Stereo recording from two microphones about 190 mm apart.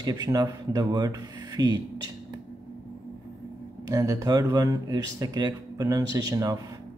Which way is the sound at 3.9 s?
20° right (ahead or behind).